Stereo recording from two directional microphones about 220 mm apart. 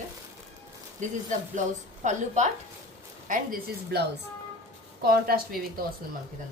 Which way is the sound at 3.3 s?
45° right (ahead or behind).